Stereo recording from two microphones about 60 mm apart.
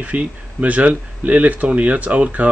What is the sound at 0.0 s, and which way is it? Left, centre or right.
Speech, right.